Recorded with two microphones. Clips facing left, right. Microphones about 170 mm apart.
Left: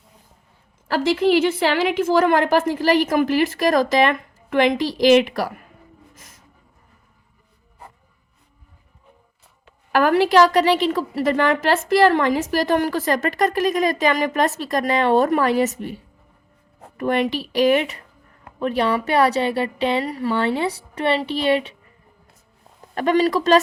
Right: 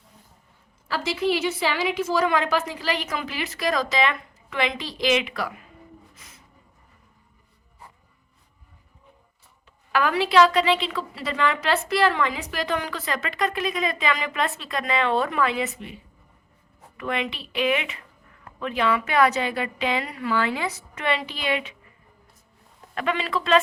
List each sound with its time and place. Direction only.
0.9 s a woman's voice: 55° left (ahead or behind)
9.9 s a woman's voice: 45° left (ahead or behind)
17.0 s a woman's voice: 40° left (ahead or behind)
23.0 s a woman's voice: 40° left (ahead or behind)